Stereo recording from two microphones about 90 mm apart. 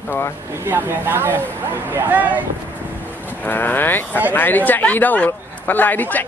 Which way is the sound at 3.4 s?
20° left (ahead or behind).